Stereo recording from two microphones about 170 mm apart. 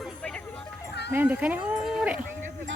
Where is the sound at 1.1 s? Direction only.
10° right (ahead or behind).